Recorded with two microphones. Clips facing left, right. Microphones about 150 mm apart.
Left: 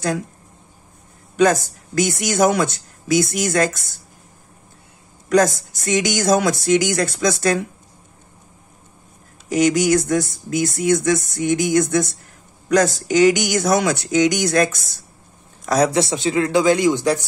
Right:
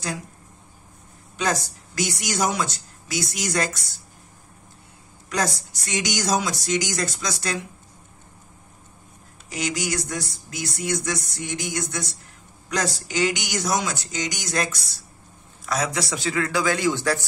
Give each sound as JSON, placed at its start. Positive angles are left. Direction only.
{"t": 1.3, "sound": "speech", "side_deg": 50}
{"t": 5.3, "sound": "speech", "side_deg": 50}
{"t": 9.5, "sound": "a man's voice", "side_deg": 45}
{"t": 16.0, "sound": "a man's voice", "side_deg": 25}